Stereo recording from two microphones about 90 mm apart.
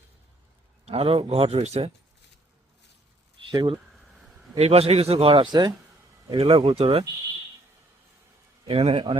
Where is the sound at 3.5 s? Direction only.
65° right (ahead or behind).